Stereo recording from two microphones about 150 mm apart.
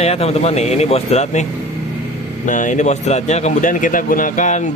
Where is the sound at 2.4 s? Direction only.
55° left (ahead or behind).